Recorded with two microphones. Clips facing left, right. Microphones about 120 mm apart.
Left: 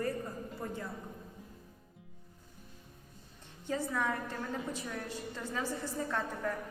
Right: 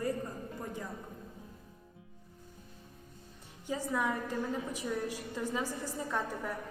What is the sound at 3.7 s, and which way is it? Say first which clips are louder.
A woman's voice: right 1 dB; 15° right (ahead or behind).